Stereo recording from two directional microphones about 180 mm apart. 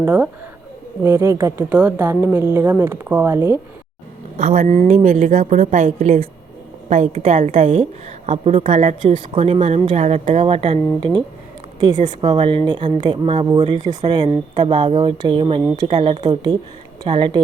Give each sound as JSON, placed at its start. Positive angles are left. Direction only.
{"t": 0.0, "sound": "speech", "side_deg": -10}
{"t": 4.4, "sound": "a woman's voice", "side_deg": -45}